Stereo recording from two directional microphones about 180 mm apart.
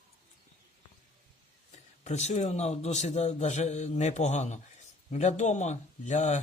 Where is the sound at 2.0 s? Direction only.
35° left (ahead or behind).